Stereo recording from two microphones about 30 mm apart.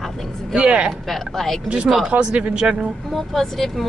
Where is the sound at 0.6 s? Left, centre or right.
Right.